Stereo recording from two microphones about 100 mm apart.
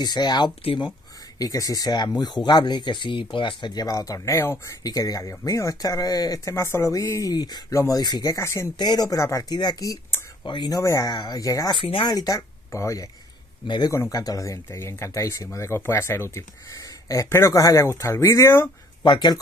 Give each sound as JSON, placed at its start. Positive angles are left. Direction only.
{"t": 0.0, "sound": "speech", "side_deg": 45}
{"t": 7.3, "sound": "speech", "side_deg": 45}
{"t": 8.7, "sound": "speech", "side_deg": 45}
{"t": 10.8, "sound": "speech", "side_deg": 35}
{"t": 11.7, "sound": "speech", "side_deg": 60}
{"t": 12.1, "sound": "speech", "side_deg": 40}
{"t": 12.4, "sound": "speech", "side_deg": 30}
{"t": 13.7, "sound": "speech", "side_deg": 50}
{"t": 13.9, "sound": "speech", "side_deg": 35}
{"t": 19.0, "sound": "speech", "side_deg": 45}